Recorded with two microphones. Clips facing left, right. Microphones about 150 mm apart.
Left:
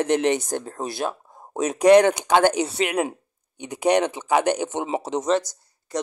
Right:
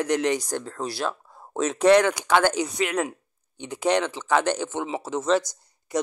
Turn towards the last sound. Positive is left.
turn(degrees=-10)  # may be behind; listen again after turning